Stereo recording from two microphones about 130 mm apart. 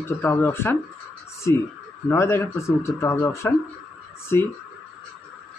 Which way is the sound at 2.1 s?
20° left (ahead or behind).